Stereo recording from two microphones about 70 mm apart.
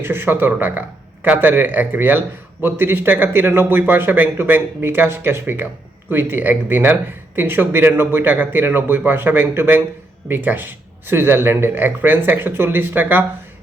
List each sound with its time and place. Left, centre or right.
0.0 s speech: right